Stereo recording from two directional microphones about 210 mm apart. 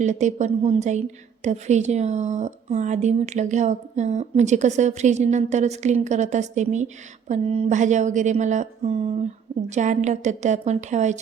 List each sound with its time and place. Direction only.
0.0 s a woman's voice: 35° right (ahead or behind)